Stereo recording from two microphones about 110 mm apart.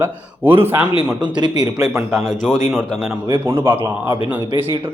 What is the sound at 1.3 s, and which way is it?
Speech, 40° right (ahead or behind).